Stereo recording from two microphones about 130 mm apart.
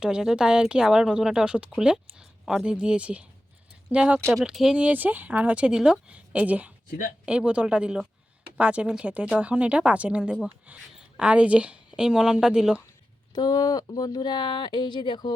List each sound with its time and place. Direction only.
0.0 s speech: 5° right (ahead or behind)
13.3 s speech: 30° left (ahead or behind)